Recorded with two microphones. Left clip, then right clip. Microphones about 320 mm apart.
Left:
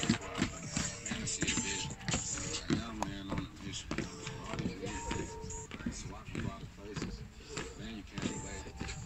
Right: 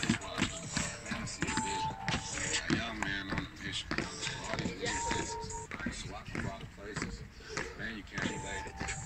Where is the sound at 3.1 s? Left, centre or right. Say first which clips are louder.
Right 5 dB; right.